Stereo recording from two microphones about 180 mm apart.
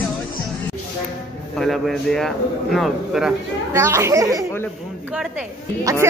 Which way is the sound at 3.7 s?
15° right (ahead or behind).